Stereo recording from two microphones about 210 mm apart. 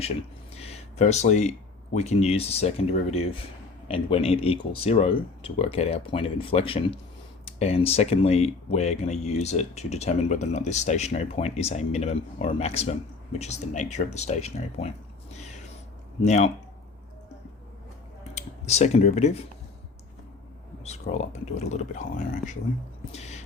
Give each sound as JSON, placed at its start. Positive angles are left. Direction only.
{"t": 0.5, "sound": "speech", "side_deg": 30}
{"t": 16.2, "sound": "speech", "side_deg": 35}
{"t": 18.3, "sound": "speech", "side_deg": 30}
{"t": 20.8, "sound": "speech", "side_deg": 30}